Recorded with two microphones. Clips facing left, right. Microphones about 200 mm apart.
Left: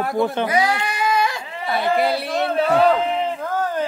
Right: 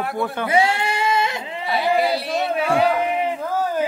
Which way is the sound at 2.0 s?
55° left (ahead or behind).